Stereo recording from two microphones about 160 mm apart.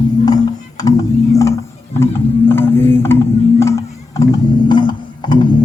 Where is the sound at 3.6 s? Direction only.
20° left (ahead or behind).